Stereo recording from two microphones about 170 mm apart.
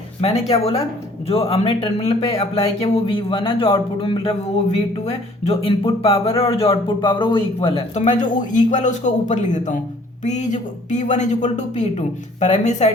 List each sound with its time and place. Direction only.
0.2 s speech: 35° left (ahead or behind)
5.5 s speech: 35° left (ahead or behind)